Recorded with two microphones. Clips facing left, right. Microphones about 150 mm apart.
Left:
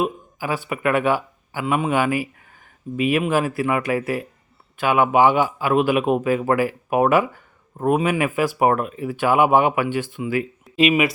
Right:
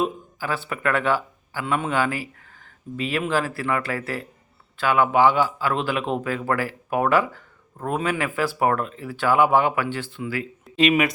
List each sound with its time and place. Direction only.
0.0 s a man's voice: 15° left (ahead or behind)
10.8 s speech: 5° left (ahead or behind)